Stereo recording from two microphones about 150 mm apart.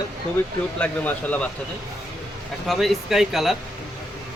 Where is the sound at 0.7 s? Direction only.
10° left (ahead or behind).